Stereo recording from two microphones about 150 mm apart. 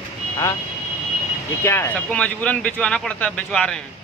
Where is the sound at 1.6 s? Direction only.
15° left (ahead or behind).